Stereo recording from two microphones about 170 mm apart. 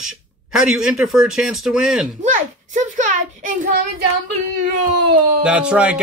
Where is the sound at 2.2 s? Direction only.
45° right (ahead or behind).